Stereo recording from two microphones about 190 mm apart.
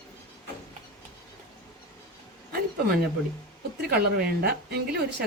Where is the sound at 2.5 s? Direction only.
55° right (ahead or behind).